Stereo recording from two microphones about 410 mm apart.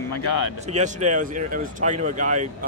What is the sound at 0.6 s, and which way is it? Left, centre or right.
Speech, centre.